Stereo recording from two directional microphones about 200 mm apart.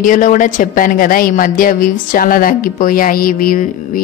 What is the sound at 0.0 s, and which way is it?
A woman's voice, 40° left (ahead or behind).